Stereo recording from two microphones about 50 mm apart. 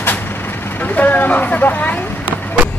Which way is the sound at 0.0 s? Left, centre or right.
Left.